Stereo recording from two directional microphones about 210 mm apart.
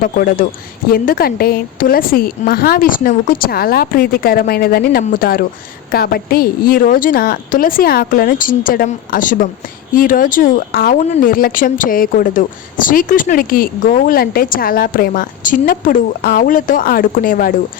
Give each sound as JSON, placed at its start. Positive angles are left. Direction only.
{"t": 0.0, "sound": "a woman's voice", "side_deg": 45}